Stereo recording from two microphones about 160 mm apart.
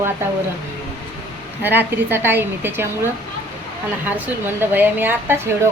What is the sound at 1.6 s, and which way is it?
Speech, 15° right (ahead or behind).